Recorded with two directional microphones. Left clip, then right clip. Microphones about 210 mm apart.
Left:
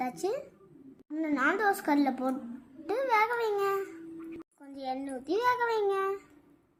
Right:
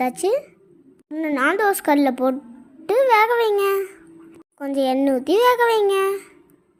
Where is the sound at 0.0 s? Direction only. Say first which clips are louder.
Right 12 dB; 40° right (ahead or behind).